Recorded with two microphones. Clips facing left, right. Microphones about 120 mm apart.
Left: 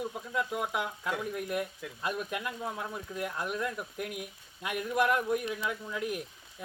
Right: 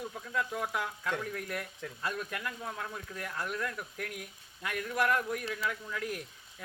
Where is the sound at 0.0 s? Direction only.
20° left (ahead or behind).